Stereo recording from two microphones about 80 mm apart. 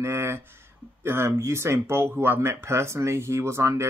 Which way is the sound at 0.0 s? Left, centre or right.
Right.